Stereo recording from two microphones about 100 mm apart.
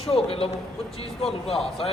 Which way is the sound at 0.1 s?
75° left (ahead or behind).